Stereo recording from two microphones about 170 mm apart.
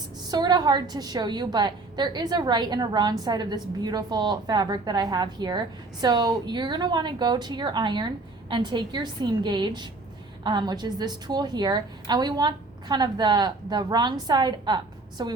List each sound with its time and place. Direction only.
0.3 s a woman's voice: 25° right (ahead or behind)